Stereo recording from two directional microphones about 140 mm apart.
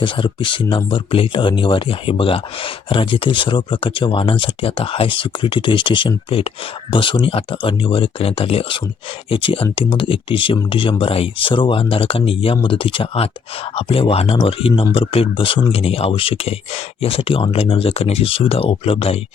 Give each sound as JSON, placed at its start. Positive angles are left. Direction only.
{"t": 0.0, "sound": "speech", "side_deg": 35}